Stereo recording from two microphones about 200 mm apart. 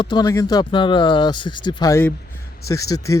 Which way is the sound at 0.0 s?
20° left (ahead or behind).